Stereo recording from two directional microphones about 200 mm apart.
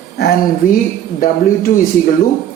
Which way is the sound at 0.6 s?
45° left (ahead or behind).